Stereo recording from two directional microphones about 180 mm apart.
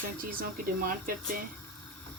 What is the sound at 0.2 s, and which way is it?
Speech, 50° right (ahead or behind).